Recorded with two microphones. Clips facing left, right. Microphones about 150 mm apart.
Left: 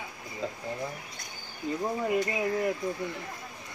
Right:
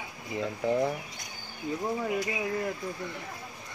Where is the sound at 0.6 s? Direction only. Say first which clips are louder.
Right 10 dB; 70° right (ahead or behind).